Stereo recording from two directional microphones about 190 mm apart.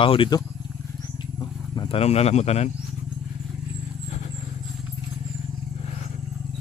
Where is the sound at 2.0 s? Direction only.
35° left (ahead or behind).